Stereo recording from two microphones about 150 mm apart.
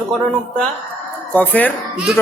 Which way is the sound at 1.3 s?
10° left (ahead or behind).